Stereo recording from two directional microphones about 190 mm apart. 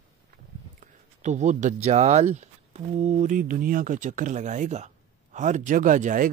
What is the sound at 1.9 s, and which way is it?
Speech, 35° right (ahead or behind).